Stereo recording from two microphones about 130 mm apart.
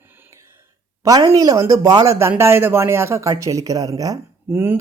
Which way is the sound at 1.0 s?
25° right (ahead or behind).